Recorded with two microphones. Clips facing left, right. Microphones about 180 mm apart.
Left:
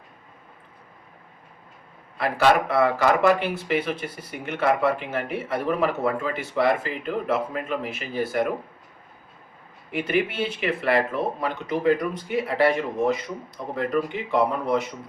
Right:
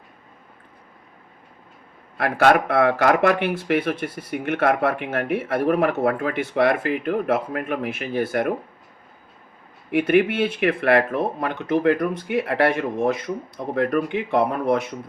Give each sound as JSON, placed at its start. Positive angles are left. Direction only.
{"t": 2.1, "sound": "speech", "side_deg": -60}
{"t": 9.9, "sound": "speech", "side_deg": -55}